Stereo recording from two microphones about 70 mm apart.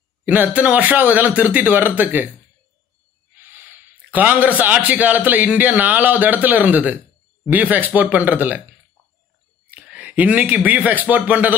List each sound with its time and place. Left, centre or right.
0.2 s a man's voice: right
3.4 s a man's voice: right
9.7 s speech: right